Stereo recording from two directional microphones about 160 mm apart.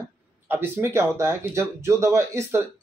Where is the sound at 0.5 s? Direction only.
15° right (ahead or behind).